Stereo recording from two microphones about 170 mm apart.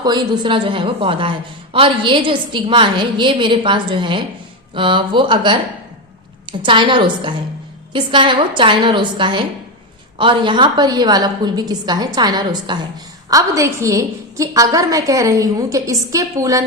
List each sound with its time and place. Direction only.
0.0 s a woman's voice: 25° right (ahead or behind)
6.6 s a woman's voice: 30° right (ahead or behind)